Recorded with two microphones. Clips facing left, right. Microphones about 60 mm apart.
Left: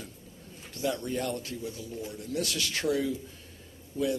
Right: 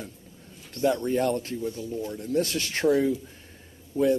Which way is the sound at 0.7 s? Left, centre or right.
Right.